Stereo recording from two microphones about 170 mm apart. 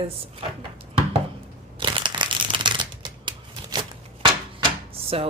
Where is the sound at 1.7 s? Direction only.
30° right (ahead or behind).